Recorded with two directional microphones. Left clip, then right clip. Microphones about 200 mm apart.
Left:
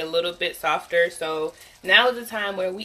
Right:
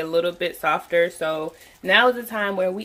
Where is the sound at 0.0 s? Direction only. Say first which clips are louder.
Right 2 dB; 35° right (ahead or behind).